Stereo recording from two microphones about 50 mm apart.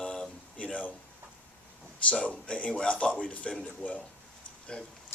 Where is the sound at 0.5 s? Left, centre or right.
Left.